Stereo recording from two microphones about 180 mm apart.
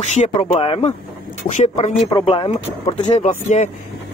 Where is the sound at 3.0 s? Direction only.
40° left (ahead or behind).